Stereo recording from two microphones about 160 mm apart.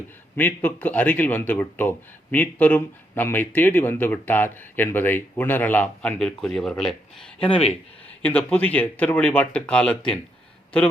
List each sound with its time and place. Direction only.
0.3 s a man's voice: 10° left (ahead or behind)
7.3 s speech: 35° left (ahead or behind)
8.2 s a man's voice: 5° left (ahead or behind)